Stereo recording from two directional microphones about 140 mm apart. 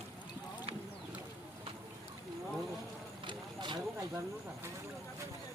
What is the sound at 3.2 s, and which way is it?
Vehicle, 35° right (ahead or behind).